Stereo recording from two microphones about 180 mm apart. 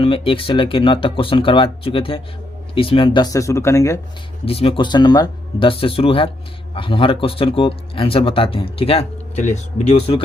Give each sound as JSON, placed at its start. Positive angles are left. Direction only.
{"t": 0.0, "sound": "speech", "side_deg": 30}
{"t": 4.4, "sound": "speech", "side_deg": 30}